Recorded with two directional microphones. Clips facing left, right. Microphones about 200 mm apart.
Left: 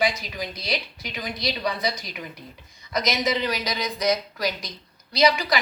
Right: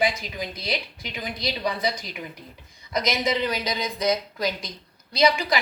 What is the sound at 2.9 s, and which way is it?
Speech, 25° right (ahead or behind).